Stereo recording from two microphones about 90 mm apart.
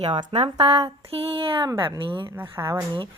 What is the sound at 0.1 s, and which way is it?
Speech, 75° right (ahead or behind).